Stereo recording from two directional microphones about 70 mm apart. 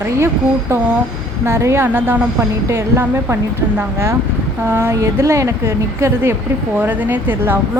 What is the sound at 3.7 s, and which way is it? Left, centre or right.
A woman's voice, right.